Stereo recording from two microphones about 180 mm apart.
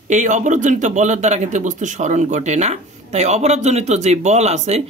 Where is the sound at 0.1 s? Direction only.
45° right (ahead or behind).